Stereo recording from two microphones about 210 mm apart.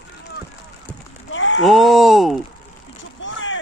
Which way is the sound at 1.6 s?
Centre (ahead or behind).